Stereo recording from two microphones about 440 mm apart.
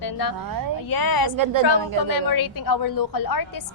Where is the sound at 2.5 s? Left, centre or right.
Left.